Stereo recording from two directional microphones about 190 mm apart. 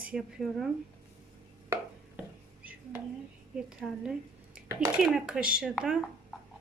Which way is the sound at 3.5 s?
5° right (ahead or behind).